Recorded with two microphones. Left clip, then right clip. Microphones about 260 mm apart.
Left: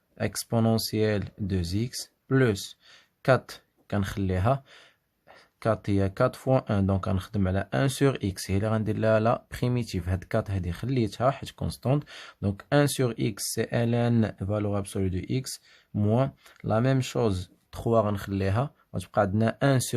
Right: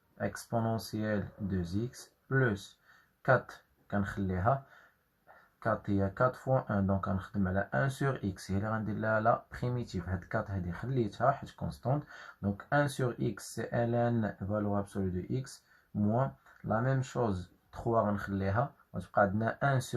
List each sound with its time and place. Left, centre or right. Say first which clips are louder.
0.2 s speech: left 6 dB; left
5.6 s speech: left 6 dB; left
16.1 s speech: left 7 dB; left